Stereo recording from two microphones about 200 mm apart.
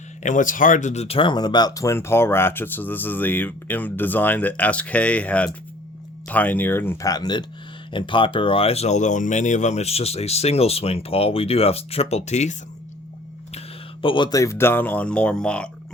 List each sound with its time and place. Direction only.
0.2 s speech: 40° left (ahead or behind)
14.0 s speech: 25° left (ahead or behind); by 15.7 s 5° left (ahead or behind)